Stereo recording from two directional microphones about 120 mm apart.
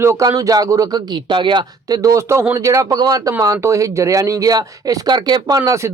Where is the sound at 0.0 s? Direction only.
25° right (ahead or behind).